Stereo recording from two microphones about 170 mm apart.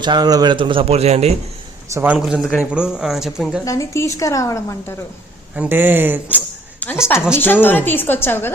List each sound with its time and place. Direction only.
0.0 s a man's voice: 25° right (ahead or behind)
1.9 s speech: 15° right (ahead or behind)
2.1 s speech: 5° right (ahead or behind)
3.6 s a woman's voice: 20° left (ahead or behind)
5.5 s speech: 10° right (ahead or behind)
6.7 s a sound: 10° left (ahead or behind)
7.3 s a woman's voice: 10° left (ahead or behind)